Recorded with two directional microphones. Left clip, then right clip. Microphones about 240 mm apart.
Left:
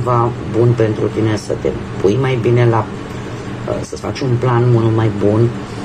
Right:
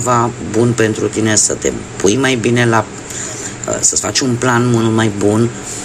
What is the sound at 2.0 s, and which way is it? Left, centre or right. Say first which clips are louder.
Speech: right 2 dB; right.